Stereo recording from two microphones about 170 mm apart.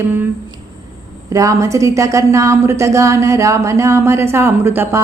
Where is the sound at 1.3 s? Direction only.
20° right (ahead or behind).